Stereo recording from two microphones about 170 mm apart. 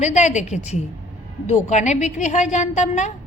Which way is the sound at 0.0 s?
45° left (ahead or behind).